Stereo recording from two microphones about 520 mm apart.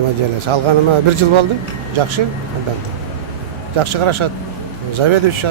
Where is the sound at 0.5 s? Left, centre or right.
Right.